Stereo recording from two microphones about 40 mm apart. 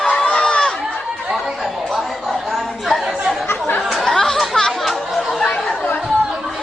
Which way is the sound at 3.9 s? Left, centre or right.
Centre.